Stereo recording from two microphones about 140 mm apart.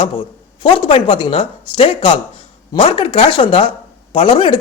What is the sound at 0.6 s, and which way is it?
Speech, 40° left (ahead or behind).